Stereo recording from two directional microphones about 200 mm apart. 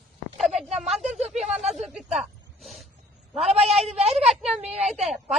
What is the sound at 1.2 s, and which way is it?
Speech, 35° right (ahead or behind).